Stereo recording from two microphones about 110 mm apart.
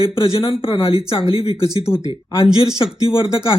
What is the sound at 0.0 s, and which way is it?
Speech, 55° left (ahead or behind).